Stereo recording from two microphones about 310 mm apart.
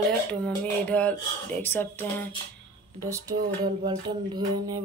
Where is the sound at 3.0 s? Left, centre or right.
Centre.